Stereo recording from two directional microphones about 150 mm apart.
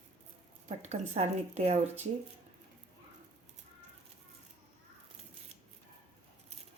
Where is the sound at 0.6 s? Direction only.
50° right (ahead or behind).